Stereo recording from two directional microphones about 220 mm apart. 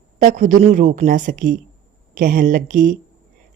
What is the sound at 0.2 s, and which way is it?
Speech, 35° right (ahead or behind).